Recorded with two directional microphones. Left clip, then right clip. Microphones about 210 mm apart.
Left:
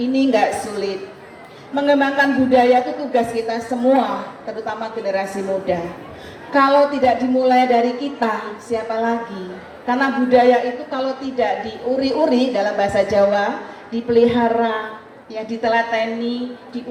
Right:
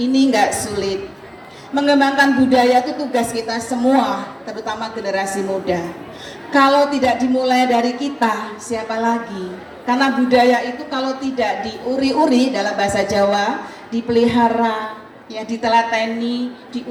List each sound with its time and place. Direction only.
0.0 s a woman's voice: 50° right (ahead or behind)